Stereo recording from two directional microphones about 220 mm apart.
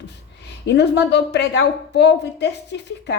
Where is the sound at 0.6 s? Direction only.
50° left (ahead or behind).